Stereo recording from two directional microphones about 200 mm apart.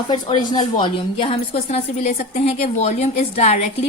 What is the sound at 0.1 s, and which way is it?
A woman's voice, 20° left (ahead or behind).